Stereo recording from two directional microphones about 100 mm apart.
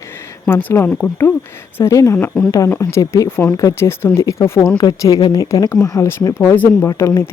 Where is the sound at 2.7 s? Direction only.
30° left (ahead or behind).